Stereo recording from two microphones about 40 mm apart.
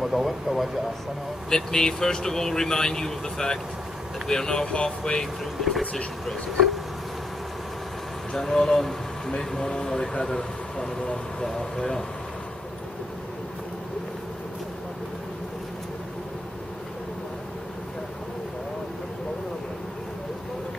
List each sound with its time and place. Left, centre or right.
0.0 s speech: centre
1.5 s speech: centre
5.4 s speech: centre
8.3 s speech: centre
11.4 s speech: centre